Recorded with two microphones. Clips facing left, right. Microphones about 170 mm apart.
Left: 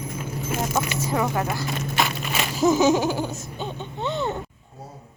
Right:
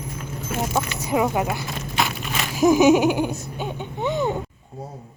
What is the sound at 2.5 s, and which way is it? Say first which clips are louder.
Giggle: right 4 dB; 15° right (ahead or behind).